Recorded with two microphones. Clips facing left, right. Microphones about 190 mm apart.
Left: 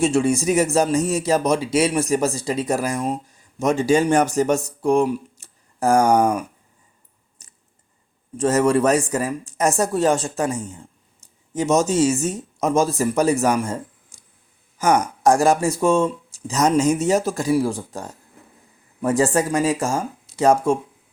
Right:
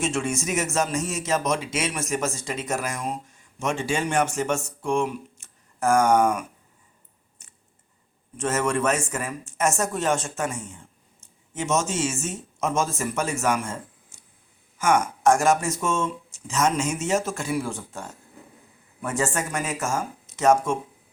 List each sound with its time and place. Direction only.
0.0 s a man's voice: 35° left (ahead or behind)
7.4 s a sound: 35° left (ahead or behind)
8.4 s a man's voice: 35° left (ahead or behind)